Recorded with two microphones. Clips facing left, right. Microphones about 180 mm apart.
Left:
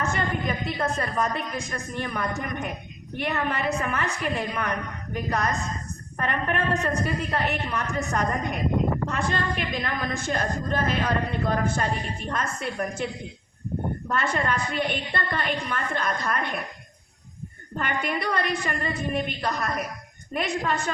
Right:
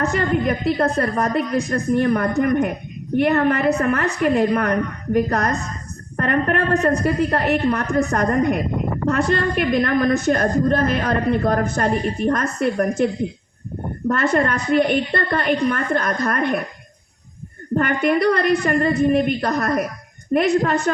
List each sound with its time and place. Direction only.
0.0 s a woman's voice: 65° right (ahead or behind)
9.1 s a woman's voice: 40° right (ahead or behind)
14.1 s a woman's voice: 45° right (ahead or behind)
17.7 s a woman's voice: 50° right (ahead or behind)
18.7 s a woman's voice: 45° right (ahead or behind)
19.5 s a woman's voice: 40° right (ahead or behind)